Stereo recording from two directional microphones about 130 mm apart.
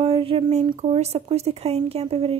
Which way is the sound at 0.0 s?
45° right (ahead or behind).